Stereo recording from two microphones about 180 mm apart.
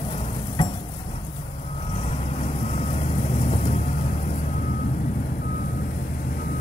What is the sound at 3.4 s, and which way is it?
Vehicle, 40° left (ahead or behind).